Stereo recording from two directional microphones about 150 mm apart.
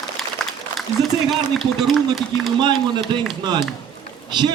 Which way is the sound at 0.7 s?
Centre (ahead or behind).